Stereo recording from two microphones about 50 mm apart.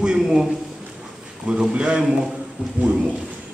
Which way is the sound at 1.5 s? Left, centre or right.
Right.